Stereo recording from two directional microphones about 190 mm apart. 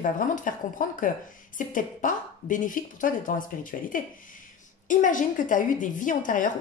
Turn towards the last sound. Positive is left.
turn(degrees=45)  # may be behind; listen again after turning